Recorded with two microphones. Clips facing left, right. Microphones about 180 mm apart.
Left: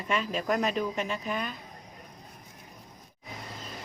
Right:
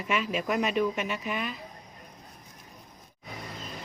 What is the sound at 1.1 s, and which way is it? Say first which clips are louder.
Speech: even; 5° right (ahead or behind).